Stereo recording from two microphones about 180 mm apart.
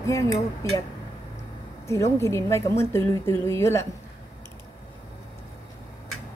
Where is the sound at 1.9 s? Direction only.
15° left (ahead or behind).